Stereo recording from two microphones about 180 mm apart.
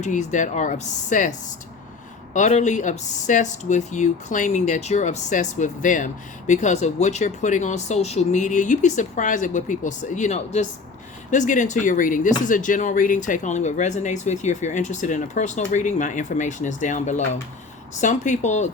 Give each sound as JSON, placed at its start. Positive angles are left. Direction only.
{"t": 0.0, "sound": "speech", "side_deg": 40}